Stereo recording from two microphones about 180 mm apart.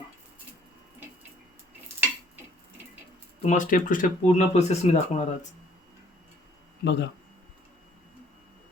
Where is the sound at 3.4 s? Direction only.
45° left (ahead or behind).